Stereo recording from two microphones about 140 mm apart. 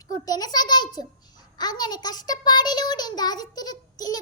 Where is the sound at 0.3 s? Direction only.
30° left (ahead or behind).